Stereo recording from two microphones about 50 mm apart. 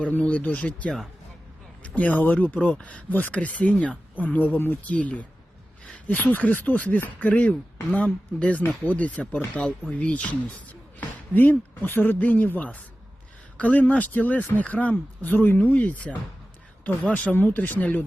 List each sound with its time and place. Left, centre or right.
0.2 s speech: left
2.0 s speech: left
3.1 s speech: left
4.9 s speech: left
5.8 s a sound: centre
6.1 s speech: left
11.3 s speech: left